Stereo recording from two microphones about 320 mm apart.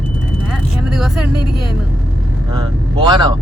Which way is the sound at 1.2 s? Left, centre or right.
Right.